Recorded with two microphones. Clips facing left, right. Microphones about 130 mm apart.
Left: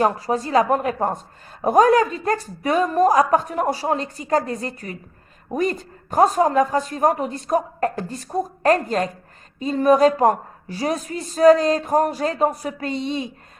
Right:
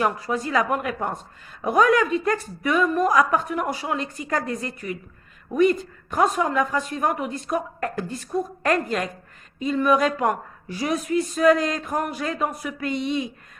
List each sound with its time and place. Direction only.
0.0 s a woman's voice: 35° left (ahead or behind)